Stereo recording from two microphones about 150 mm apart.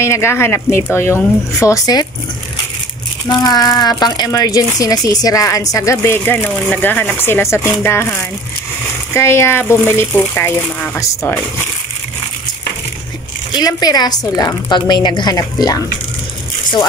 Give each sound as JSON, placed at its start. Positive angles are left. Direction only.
{"t": 0.0, "sound": "a woman's voice", "side_deg": 20}
{"t": 3.3, "sound": "a woman's voice", "side_deg": 25}
{"t": 13.5, "sound": "a woman's voice", "side_deg": 25}